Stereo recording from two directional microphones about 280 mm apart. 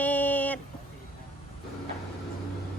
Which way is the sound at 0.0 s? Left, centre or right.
Centre.